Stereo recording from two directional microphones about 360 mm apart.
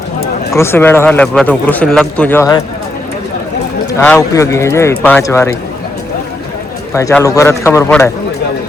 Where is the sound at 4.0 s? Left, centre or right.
Centre.